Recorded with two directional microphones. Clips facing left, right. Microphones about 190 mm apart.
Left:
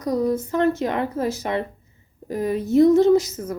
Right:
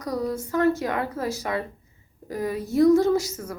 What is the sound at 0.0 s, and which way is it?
A woman's voice, 20° left (ahead or behind).